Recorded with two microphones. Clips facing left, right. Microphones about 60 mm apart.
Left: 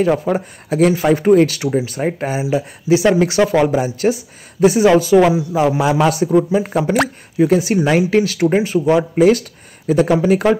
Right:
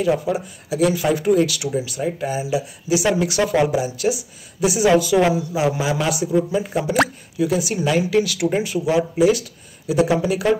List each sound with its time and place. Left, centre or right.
0.0 s speech: left
5.5 s speech: left
8.8 s speech: left